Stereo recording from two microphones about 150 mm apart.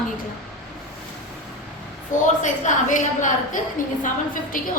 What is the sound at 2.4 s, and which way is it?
A woman's voice, 55° left (ahead or behind).